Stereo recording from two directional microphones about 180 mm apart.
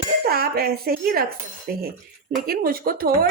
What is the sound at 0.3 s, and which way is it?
Speech, 60° right (ahead or behind).